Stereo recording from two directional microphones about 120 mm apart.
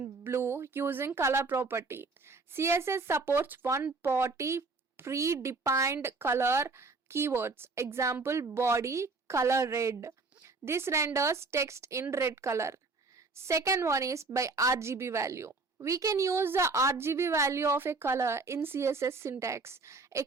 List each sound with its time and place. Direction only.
0.0 s a woman's voice: 20° right (ahead or behind)